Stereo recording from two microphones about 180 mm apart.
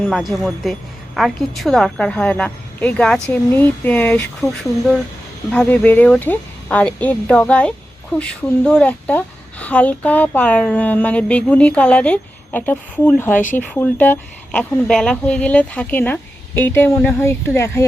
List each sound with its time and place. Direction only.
0.0 s speech: centre (ahead or behind)
13.3 s speech: 45° left (ahead or behind)
13.6 s speech: 10° left (ahead or behind)